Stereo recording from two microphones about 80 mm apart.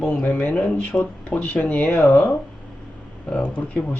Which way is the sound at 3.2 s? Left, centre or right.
Centre.